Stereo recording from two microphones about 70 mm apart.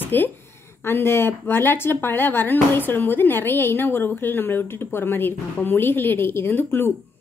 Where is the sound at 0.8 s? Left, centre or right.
Left.